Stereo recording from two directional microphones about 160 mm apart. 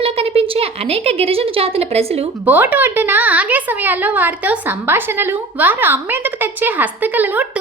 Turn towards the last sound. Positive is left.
turn(degrees=-10)  # may be behind; listen again after turning